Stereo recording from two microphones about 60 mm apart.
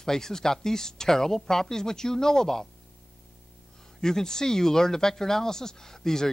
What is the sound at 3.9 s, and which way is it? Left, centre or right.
Speech, centre.